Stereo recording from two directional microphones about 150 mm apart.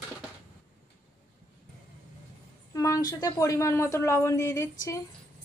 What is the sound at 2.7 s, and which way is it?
A woman's voice, 20° left (ahead or behind).